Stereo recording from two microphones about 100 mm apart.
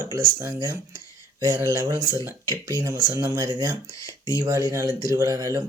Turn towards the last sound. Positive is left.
turn(degrees=-35)  # may be behind; listen again after turning